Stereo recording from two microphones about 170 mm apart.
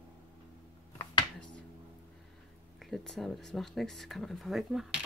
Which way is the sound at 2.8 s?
Centre (ahead or behind).